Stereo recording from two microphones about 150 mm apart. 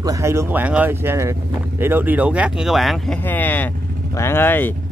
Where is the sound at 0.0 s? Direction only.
20° right (ahead or behind); by 3.2 s centre (ahead or behind).